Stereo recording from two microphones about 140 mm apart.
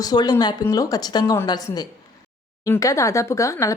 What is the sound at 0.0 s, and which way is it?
Speech, 30° left (ahead or behind).